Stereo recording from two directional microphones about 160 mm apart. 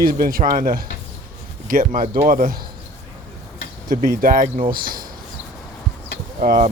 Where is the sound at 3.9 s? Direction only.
60° right (ahead or behind).